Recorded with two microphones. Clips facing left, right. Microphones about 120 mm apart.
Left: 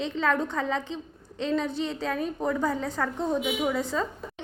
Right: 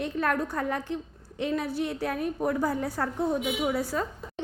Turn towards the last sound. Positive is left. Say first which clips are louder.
# left 1 dB
turn(degrees=-5)  # may be behind; listen again after turning